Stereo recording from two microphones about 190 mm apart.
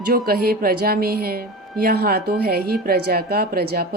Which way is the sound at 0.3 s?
50° right (ahead or behind).